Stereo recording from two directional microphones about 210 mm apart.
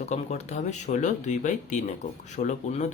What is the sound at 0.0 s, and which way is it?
Speech, 30° left (ahead or behind).